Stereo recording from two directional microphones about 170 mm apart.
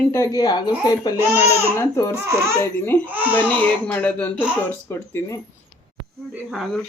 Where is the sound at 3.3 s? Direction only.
10° left (ahead or behind).